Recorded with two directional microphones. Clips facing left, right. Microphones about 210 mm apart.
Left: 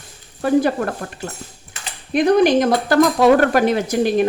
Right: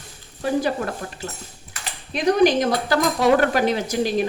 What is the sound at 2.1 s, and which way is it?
Speech, 55° left (ahead or behind).